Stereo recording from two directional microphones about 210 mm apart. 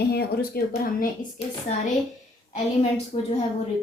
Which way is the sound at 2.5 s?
30° left (ahead or behind).